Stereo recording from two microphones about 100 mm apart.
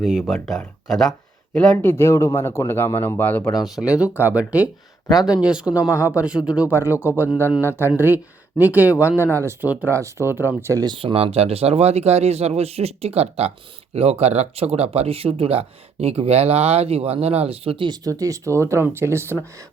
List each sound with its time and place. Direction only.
0.0 s speech: centre (ahead or behind); by 3.4 s 20° left (ahead or behind)
3.6 s speech: 5° right (ahead or behind)
5.0 s speech: 35° left (ahead or behind)
5.4 s speech: 10° right (ahead or behind)
9.4 s speech: 25° right (ahead or behind)
10.8 s speech: 60° right (ahead or behind)
17.8 s speech: 45° right (ahead or behind)
18.1 s speech: 30° right (ahead or behind)